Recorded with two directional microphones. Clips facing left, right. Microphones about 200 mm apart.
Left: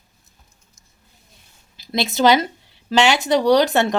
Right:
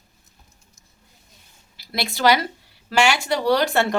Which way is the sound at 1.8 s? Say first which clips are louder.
Left 4 dB; 20° left (ahead or behind).